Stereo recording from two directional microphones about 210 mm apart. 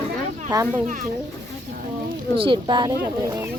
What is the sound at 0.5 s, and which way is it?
Speech, 20° right (ahead or behind).